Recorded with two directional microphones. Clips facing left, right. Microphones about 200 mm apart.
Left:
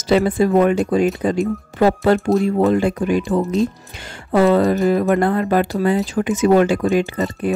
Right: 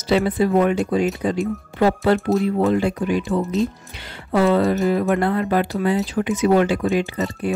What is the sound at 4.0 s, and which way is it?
Speech, 45° left (ahead or behind).